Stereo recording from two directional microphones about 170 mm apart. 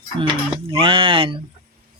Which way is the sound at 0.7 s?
30° right (ahead or behind).